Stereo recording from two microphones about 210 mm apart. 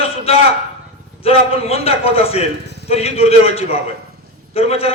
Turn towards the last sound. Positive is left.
turn(degrees=30)  # may be behind; listen again after turning